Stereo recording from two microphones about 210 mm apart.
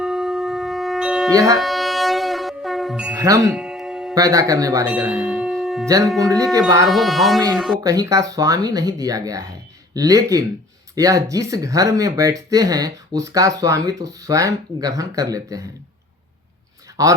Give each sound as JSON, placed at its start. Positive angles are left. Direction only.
{"t": 0.0, "sound": "wind instrument", "side_deg": 0}
{"t": 1.3, "sound": "speech", "side_deg": -15}
{"t": 1.5, "sound": "music", "side_deg": 0}
{"t": 3.2, "sound": "speech", "side_deg": -15}
{"t": 3.5, "sound": "music", "side_deg": -5}
{"t": 4.1, "sound": "speech", "side_deg": -15}
{"t": 5.8, "sound": "speech", "side_deg": -15}
{"t": 6.8, "sound": "speech", "side_deg": 0}
{"t": 7.9, "sound": "speech", "side_deg": -15}
{"t": 17.0, "sound": "speech", "side_deg": -15}